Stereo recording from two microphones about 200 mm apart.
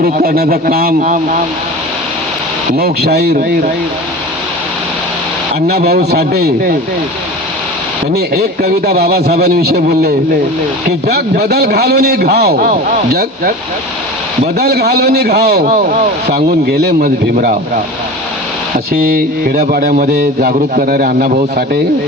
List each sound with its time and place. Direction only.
0.0 s a man's voice: 50° right (ahead or behind)
2.7 s a man's voice: 50° right (ahead or behind)
5.6 s a man's voice: 55° right (ahead or behind)
8.1 s a man's voice: 55° right (ahead or behind)
14.6 s a man's voice: 50° right (ahead or behind)
19.1 s a man's voice: 50° right (ahead or behind)